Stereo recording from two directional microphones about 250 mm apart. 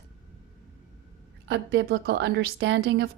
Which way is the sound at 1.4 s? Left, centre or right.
Right.